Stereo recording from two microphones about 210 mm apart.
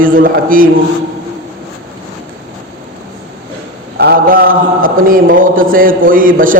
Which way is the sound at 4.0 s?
45° right (ahead or behind).